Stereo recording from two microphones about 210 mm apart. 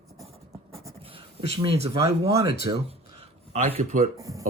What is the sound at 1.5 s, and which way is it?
Speech, 25° right (ahead or behind).